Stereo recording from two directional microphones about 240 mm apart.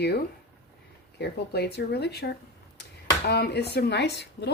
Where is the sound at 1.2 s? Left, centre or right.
Left.